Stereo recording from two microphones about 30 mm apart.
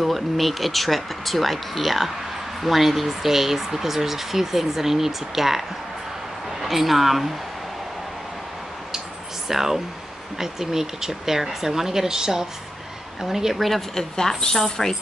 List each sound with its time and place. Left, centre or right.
0.0 s speech: centre
9.5 s speech: centre
13.6 s speech: centre
13.9 s a woman's voice: centre